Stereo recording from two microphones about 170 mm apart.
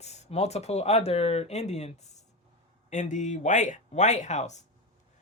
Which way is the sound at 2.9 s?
45° left (ahead or behind).